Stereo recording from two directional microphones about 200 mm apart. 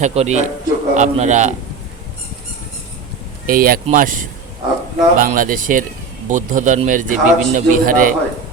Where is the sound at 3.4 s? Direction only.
45° right (ahead or behind).